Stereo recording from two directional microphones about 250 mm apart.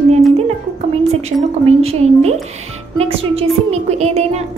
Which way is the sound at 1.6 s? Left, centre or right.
Right.